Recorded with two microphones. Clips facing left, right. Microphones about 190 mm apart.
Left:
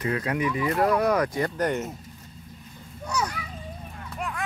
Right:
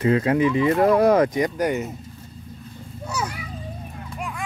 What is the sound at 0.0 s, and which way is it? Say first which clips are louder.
Speech: right 8 dB; 25° right (ahead or behind).